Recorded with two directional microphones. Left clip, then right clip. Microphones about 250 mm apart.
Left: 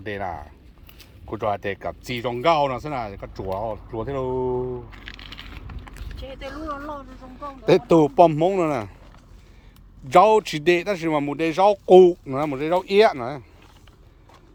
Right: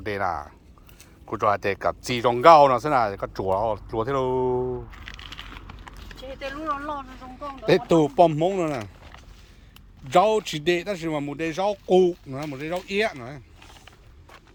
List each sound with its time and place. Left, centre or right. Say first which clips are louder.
0.0 s speech: right 3 dB; centre
4.5 s a sound: right 1 dB; centre
4.9 s speech: even; centre
10.1 s a man's voice: left 4 dB; centre